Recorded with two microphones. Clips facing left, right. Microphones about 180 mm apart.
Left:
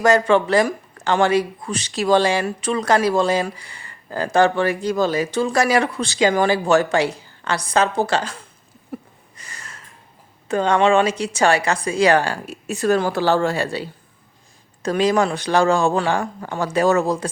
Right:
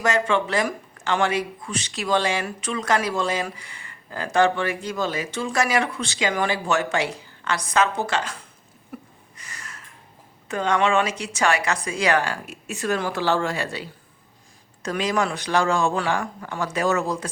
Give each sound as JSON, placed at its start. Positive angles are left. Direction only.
{"t": 0.0, "sound": "speech", "side_deg": 40}
{"t": 8.9, "sound": "a sound", "side_deg": 30}
{"t": 10.5, "sound": "speech", "side_deg": 30}